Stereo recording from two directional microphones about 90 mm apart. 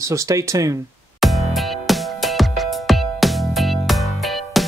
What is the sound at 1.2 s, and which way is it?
Music, centre (ahead or behind).